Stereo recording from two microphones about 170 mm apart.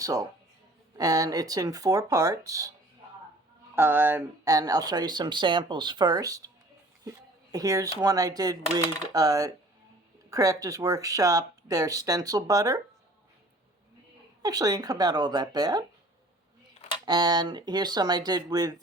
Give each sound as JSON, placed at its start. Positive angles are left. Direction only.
{"t": 0.0, "sound": "speech", "side_deg": -20}
{"t": 3.8, "sound": "speech", "side_deg": -10}
{"t": 7.5, "sound": "speech", "side_deg": -20}
{"t": 14.4, "sound": "speech", "side_deg": -20}
{"t": 17.1, "sound": "speech", "side_deg": -25}